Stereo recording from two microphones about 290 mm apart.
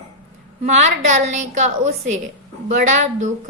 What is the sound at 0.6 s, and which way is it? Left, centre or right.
A woman's voice, right.